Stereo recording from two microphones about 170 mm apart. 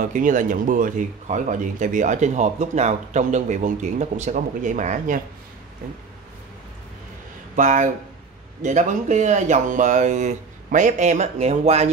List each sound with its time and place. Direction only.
0.0 s speech: 50° right (ahead or behind)
7.5 s speech: 50° right (ahead or behind)